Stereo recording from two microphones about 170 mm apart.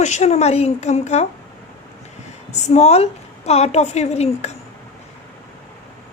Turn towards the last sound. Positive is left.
turn(degrees=40)  # may be behind; listen again after turning